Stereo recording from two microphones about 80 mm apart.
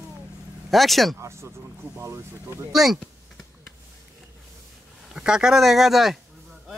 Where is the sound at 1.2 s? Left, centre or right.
Right.